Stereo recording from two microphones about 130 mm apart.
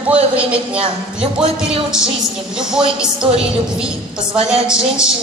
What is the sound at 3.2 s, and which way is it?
Speech, 45° right (ahead or behind).